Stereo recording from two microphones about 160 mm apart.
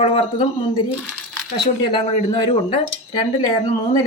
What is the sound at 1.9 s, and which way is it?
Speech, 30° left (ahead or behind).